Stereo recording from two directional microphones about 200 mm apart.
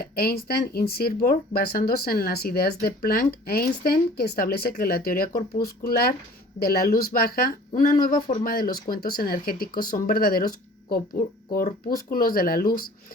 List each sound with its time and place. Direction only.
0.0 s speech: 50° left (ahead or behind)
11.5 s speech: 45° left (ahead or behind)